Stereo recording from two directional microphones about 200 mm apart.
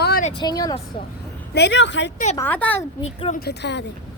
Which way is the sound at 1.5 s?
60° left (ahead or behind).